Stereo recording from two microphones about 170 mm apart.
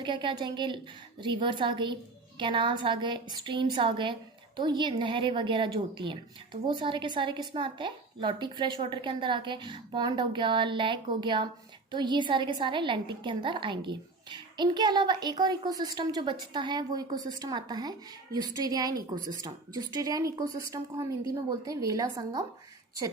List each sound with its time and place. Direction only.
0.0 s a woman's voice: 25° right (ahead or behind)